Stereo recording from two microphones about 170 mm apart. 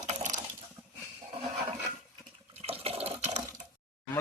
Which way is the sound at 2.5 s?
35° right (ahead or behind).